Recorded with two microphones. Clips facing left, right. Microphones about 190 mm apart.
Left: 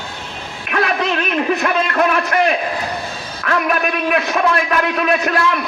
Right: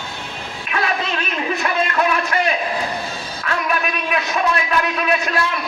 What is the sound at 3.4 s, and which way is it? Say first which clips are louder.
A man's voice: left 4 dB; 55° left (ahead or behind).